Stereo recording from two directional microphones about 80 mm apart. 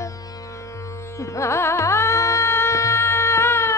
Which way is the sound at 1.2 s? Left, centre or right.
Left.